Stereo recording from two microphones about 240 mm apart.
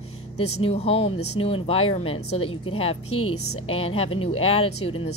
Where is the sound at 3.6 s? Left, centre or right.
Left.